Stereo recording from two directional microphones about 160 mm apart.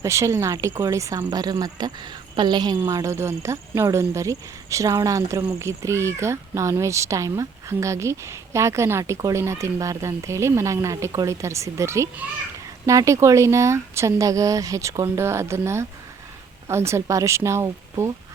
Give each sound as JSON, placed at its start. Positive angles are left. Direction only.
{"t": 0.0, "sound": "speech", "side_deg": -20}